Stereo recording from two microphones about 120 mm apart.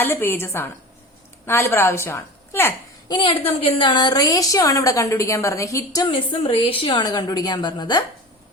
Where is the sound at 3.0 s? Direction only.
45° left (ahead or behind); by 6.0 s 25° left (ahead or behind).